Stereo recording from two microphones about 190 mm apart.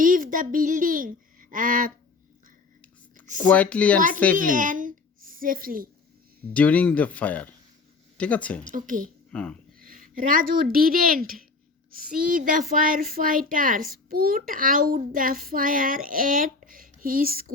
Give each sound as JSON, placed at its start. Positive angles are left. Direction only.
{"t": 0.0, "sound": "speech", "side_deg": -45}
{"t": 3.5, "sound": "speech", "side_deg": 5}
{"t": 4.4, "sound": "a child's voice", "side_deg": -45}
{"t": 6.5, "sound": "speech", "side_deg": 5}
{"t": 8.6, "sound": "a child's voice", "side_deg": -45}
{"t": 9.3, "sound": "speech", "side_deg": 5}
{"t": 9.8, "sound": "a child's voice", "side_deg": -45}